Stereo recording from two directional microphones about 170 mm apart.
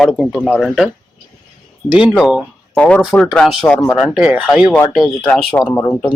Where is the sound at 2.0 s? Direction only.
Centre (ahead or behind).